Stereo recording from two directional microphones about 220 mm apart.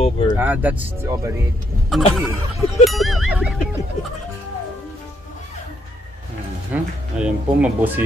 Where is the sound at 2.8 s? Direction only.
Centre (ahead or behind).